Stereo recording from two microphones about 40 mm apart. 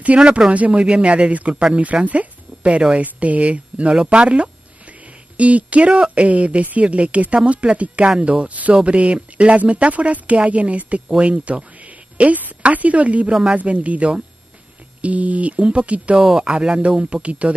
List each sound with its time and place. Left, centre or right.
0.1 s speech: right
2.0 s a sound: right
3.0 s speech: right
11.1 s a woman's voice: right
13.3 s speech: right
13.6 s speech: right
16.2 s speech: centre; by 17.6 s right